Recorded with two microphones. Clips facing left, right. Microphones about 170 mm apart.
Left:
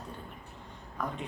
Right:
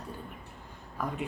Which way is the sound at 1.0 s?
10° right (ahead or behind).